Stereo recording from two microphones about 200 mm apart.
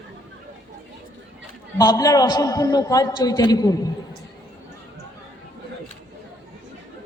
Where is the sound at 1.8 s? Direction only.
20° left (ahead or behind).